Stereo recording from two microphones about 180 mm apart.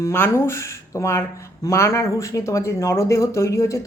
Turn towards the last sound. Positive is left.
turn(degrees=15)  # may be behind; listen again after turning